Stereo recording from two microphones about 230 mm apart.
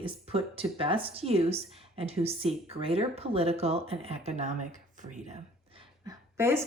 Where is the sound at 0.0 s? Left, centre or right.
Right.